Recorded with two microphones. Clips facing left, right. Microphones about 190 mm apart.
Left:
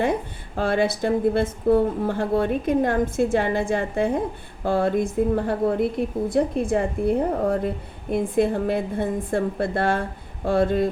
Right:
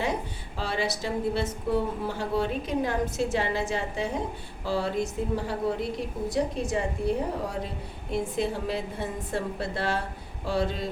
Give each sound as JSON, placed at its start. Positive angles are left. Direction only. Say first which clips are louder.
{"t": 0.0, "sound": "a woman's voice", "louder": "left 6 dB", "side_deg": 55}